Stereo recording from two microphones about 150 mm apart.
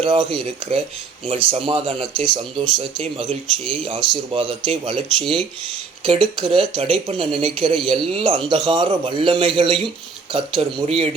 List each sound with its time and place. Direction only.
0.0 s speech: 35° right (ahead or behind)